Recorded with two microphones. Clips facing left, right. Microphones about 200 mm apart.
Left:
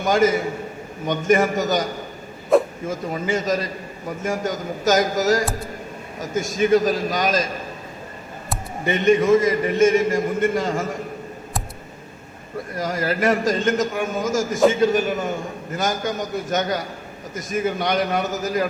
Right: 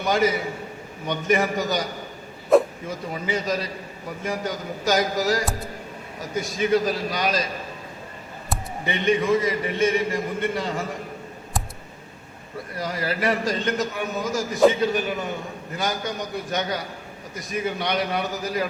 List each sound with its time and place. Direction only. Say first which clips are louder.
0.0 s a man's voice: left 4 dB; 45° left (ahead or behind)
2.5 s a sound: even; centre (ahead or behind)
2.8 s a man's voice: left 4 dB; 45° left (ahead or behind)
8.8 s a man's voice: left 5 dB; 45° left (ahead or behind)
12.7 s a man's voice: left 4 dB; 45° left (ahead or behind)